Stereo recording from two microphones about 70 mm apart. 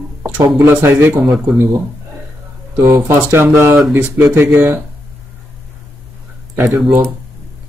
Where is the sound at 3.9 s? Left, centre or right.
Right.